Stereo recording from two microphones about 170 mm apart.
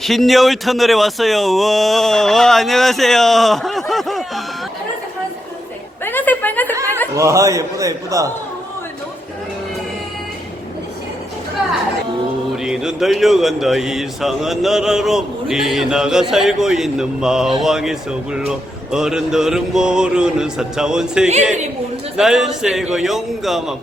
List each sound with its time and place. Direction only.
0.0 s speech: centre (ahead or behind)
6.1 s a sound: 10° left (ahead or behind)
7.2 s a man's voice: 20° right (ahead or behind)
12.6 s speech: 5° right (ahead or behind)